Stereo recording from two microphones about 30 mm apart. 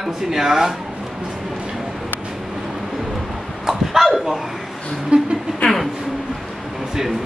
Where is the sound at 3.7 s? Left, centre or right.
Centre.